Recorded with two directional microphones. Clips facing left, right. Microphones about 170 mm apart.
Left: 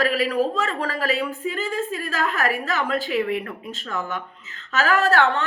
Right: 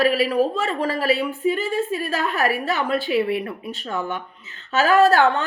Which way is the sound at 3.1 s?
30° right (ahead or behind).